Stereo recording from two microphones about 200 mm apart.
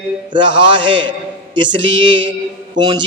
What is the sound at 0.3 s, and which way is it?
Mantra, 25° right (ahead or behind).